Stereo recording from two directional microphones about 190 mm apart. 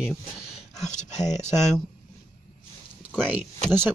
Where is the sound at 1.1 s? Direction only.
35° left (ahead or behind).